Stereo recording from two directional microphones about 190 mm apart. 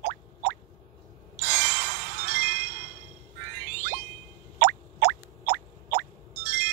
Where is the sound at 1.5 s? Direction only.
55° right (ahead or behind).